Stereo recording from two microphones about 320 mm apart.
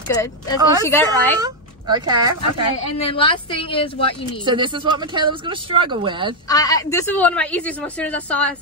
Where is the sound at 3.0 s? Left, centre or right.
Centre.